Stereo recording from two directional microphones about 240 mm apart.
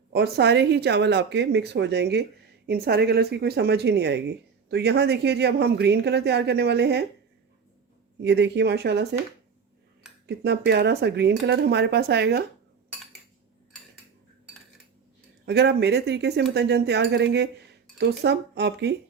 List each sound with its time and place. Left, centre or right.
0.1 s speech: right
8.2 s speech: right
10.2 s speech: right
15.4 s speech: right